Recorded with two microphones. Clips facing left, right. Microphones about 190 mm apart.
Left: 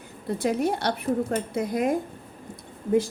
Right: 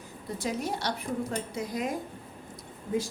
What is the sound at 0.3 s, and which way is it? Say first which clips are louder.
A woman's voice: left 7 dB; 60° left (ahead or behind).